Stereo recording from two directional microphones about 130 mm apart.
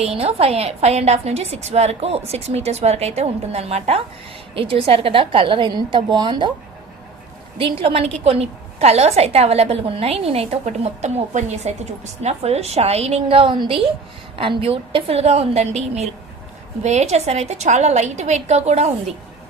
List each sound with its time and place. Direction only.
0.0 s a woman's voice: 50° right (ahead or behind); by 6.5 s 35° right (ahead or behind)
7.6 s a woman's voice: 45° right (ahead or behind)
16.8 s a woman's voice: 60° right (ahead or behind)